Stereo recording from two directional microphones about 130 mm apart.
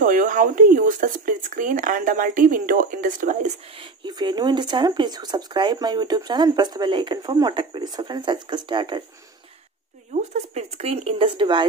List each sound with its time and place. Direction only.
0.0 s speech: 90° right
3.7 s speech: 40° right (ahead or behind)
10.1 s speech: 55° right (ahead or behind); by 11.6 s 40° right (ahead or behind)